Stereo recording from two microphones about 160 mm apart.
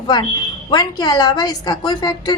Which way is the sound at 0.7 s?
25° left (ahead or behind).